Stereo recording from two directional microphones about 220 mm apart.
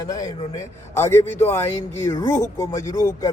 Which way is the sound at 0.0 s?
15° left (ahead or behind).